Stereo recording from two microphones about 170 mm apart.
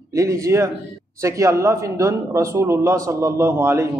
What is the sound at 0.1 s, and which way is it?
Speech, 20° right (ahead or behind).